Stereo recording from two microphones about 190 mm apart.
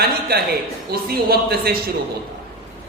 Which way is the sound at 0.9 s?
55° right (ahead or behind).